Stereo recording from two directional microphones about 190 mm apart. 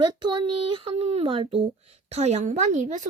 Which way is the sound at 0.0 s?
25° right (ahead or behind).